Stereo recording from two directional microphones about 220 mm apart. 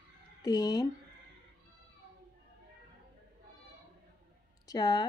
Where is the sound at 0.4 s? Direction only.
15° left (ahead or behind).